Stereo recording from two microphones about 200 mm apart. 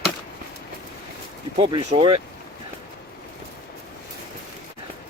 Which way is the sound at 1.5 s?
25° right (ahead or behind).